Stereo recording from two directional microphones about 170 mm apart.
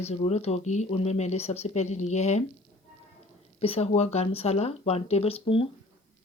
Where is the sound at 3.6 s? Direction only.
35° left (ahead or behind).